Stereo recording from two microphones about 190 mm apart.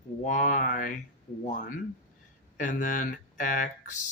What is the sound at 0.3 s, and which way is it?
Speech, 45° left (ahead or behind).